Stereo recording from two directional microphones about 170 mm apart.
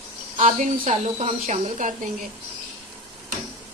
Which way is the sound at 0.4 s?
45° right (ahead or behind).